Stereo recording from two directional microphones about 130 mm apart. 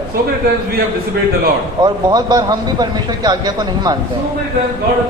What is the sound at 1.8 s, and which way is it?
Speech, 30° right (ahead or behind).